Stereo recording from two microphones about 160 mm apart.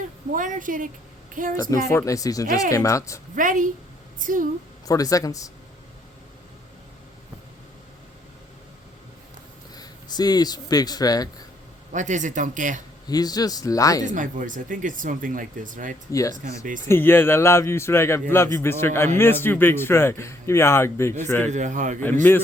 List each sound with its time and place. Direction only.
0.3 s speech: 55° right (ahead or behind)
1.9 s speech: 20° left (ahead or behind)
3.3 s speech: 55° right (ahead or behind)
4.9 s speech: 20° left (ahead or behind)
9.7 s speech: 25° left (ahead or behind)
11.9 s speech: 50° right (ahead or behind)
13.1 s speech: 25° left (ahead or behind)
14.0 s speech: 55° right (ahead or behind)
16.9 s a man's voice: 15° left (ahead or behind)
21.5 s speech: 50° right (ahead or behind)